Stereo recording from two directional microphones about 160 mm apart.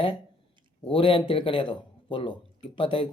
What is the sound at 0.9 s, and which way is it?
Speech, 35° left (ahead or behind).